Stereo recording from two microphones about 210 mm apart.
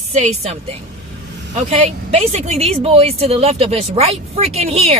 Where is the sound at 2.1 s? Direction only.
30° right (ahead or behind).